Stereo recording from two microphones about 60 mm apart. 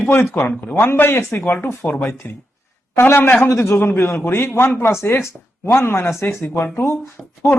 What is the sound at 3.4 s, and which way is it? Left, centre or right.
A man's voice, left.